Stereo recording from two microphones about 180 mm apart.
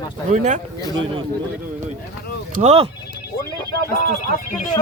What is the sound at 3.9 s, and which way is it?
Speech, 50° left (ahead or behind).